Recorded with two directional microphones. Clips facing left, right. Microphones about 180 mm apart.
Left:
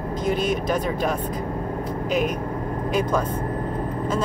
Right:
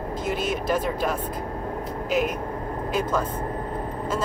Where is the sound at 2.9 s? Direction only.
5° right (ahead or behind).